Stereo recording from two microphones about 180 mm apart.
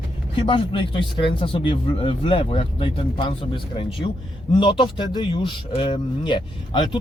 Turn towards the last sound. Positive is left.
turn(degrees=25)  # may be behind; listen again after turning